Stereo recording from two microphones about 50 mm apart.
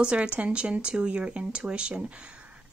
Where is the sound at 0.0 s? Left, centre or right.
Right.